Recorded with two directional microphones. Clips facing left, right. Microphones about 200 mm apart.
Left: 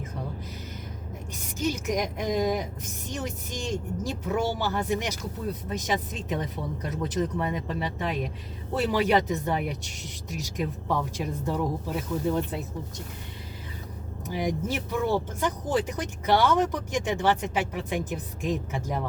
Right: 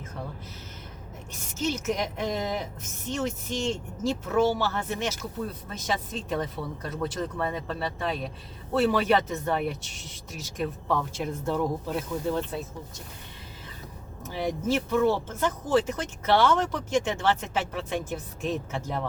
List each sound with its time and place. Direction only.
1.5 s speech: 15° left (ahead or behind)
14.3 s speech: 15° left (ahead or behind)